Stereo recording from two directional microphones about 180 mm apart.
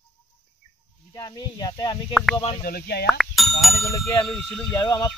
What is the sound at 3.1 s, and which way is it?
Speech, centre (ahead or behind).